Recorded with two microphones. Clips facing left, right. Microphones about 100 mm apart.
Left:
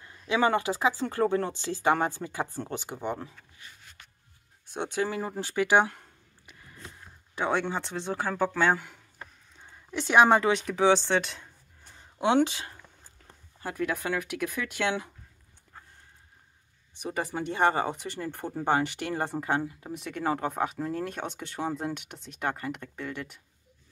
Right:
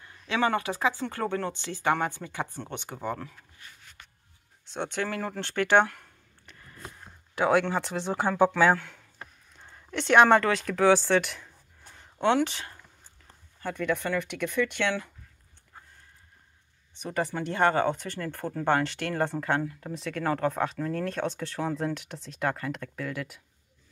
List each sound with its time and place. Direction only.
0.0 s speech: 20° left (ahead or behind)
4.7 s speech: 10° left (ahead or behind)
7.3 s speech: centre (ahead or behind)
8.0 s speech: 20° right (ahead or behind)
8.7 s speech: 10° left (ahead or behind)
13.6 s speech: 5° left (ahead or behind)
17.0 s speech: 10° left (ahead or behind)